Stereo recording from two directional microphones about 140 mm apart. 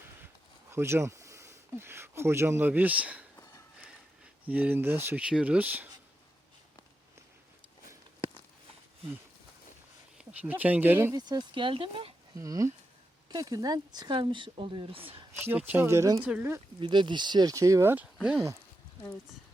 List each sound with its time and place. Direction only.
0.7 s speech: 20° right (ahead or behind)
3.3 s a sound: 25° left (ahead or behind)
4.4 s speech: 10° right (ahead or behind)
10.2 s speech: 10° right (ahead or behind)
11.2 s speech: 30° right (ahead or behind)
12.4 s speech: 25° right (ahead or behind); by 15.4 s 45° right (ahead or behind)
15.4 s speech: 15° right (ahead or behind)
16.2 s speech: 10° right (ahead or behind)
16.8 s speech: 35° right (ahead or behind); by 18.4 s 10° right (ahead or behind)